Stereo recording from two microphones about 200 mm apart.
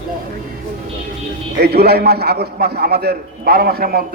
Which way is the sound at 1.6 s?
55° right (ahead or behind).